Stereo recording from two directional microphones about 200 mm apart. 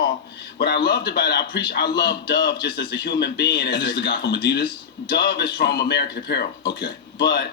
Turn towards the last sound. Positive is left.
turn(degrees=55)  # may be behind; listen again after turning